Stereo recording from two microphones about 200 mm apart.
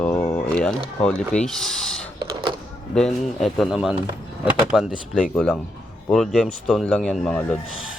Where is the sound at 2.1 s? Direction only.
25° right (ahead or behind).